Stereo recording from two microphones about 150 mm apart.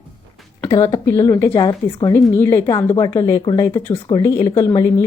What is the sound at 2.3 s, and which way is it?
Speech, 15° left (ahead or behind).